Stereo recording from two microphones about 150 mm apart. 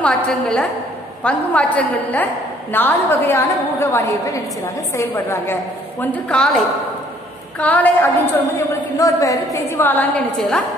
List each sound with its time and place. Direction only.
0.0 s a woman's voice: 5° left (ahead or behind)
8.9 s a woman's voice: 20° left (ahead or behind)